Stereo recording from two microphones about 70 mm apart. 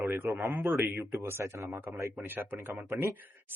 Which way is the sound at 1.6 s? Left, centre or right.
Right.